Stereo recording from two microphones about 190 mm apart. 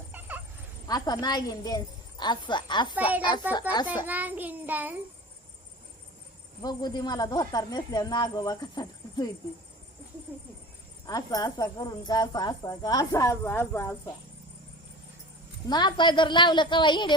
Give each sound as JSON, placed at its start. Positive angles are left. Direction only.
{"t": 0.1, "sound": "a sound", "side_deg": -10}
{"t": 0.9, "sound": "speech", "side_deg": 20}
{"t": 4.0, "sound": "child singing", "side_deg": -10}
{"t": 6.6, "sound": "speech", "side_deg": 20}
{"t": 11.0, "sound": "speech", "side_deg": 20}
{"t": 15.7, "sound": "speech", "side_deg": 20}